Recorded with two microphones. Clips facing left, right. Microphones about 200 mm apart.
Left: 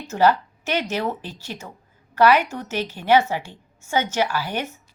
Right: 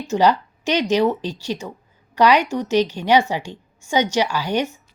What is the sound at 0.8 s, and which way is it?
A woman's voice, 15° right (ahead or behind).